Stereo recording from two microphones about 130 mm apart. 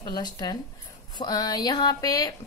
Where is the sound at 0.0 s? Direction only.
30° left (ahead or behind).